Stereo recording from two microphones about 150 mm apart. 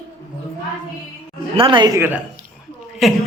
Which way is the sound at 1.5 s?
35° right (ahead or behind).